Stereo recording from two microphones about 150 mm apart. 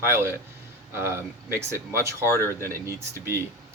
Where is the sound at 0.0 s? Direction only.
15° right (ahead or behind).